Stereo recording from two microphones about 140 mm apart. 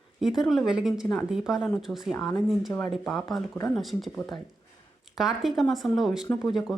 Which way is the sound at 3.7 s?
Centre (ahead or behind).